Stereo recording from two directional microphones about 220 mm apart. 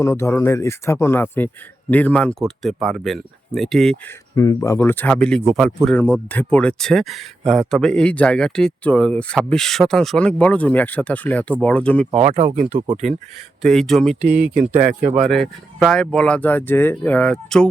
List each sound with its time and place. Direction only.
0.0 s speech: 10° left (ahead or behind)
4.4 s speech: 15° left (ahead or behind)
12.1 s speech: 30° right (ahead or behind)
13.6 s speech: centre (ahead or behind)
14.5 s a man's voice: 30° right (ahead or behind)
15.2 s speech: centre (ahead or behind)